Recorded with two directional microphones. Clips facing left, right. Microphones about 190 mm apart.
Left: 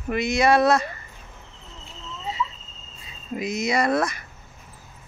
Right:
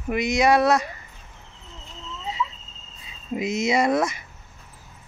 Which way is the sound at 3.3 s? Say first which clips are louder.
Right 2 dB; 25° right (ahead or behind).